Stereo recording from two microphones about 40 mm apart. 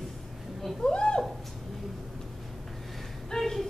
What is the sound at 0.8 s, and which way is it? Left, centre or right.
Speech, left.